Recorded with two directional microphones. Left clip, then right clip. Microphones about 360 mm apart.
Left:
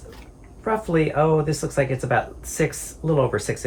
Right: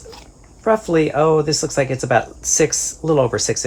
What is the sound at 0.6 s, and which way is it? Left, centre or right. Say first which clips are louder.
Speech: right 6 dB; centre.